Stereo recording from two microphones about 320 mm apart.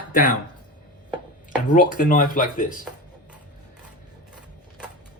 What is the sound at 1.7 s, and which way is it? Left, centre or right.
Speech, left.